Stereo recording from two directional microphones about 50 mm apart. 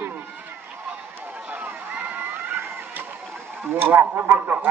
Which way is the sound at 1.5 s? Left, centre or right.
Right.